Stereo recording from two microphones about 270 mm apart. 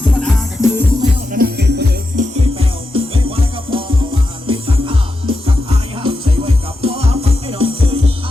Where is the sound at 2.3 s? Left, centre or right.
Right.